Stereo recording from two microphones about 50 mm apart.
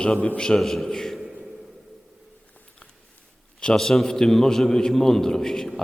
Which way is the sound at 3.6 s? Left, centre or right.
Centre.